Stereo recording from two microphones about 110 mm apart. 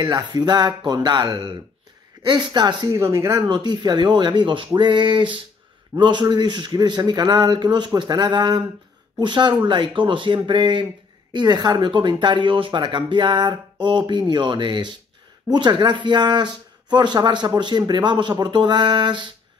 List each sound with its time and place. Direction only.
0.0 s speech: 40° right (ahead or behind)
2.9 s speech: 25° right (ahead or behind)
3.4 s speech: 40° right (ahead or behind)